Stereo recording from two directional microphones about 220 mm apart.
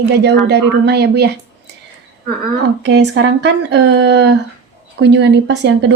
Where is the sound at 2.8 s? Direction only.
50° right (ahead or behind).